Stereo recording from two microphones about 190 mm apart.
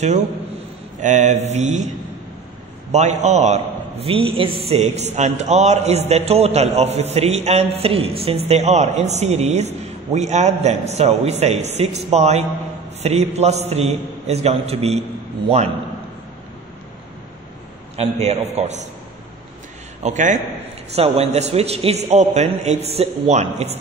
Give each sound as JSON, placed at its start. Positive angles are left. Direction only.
{"t": 1.0, "sound": "a woman's voice", "side_deg": -40}
{"t": 2.9, "sound": "a woman's voice", "side_deg": -40}
{"t": 17.9, "sound": "a woman's voice", "side_deg": -35}
{"t": 20.0, "sound": "a woman's voice", "side_deg": -40}